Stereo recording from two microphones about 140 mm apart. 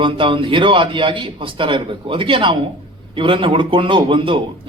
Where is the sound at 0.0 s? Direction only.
35° right (ahead or behind).